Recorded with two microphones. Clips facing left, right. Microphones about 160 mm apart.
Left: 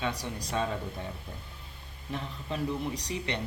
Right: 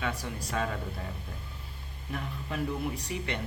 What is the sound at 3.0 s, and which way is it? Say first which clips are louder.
Speech: left 1 dB; 20° left (ahead or behind).